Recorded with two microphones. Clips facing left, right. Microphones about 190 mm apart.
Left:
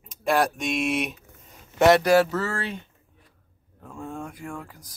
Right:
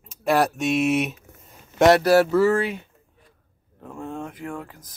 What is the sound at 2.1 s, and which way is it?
Speech, 10° right (ahead or behind).